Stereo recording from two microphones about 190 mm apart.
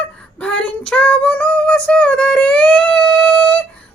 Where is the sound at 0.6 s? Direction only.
5° left (ahead or behind).